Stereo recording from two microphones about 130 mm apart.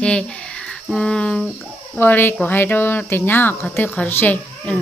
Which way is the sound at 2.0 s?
15° left (ahead or behind).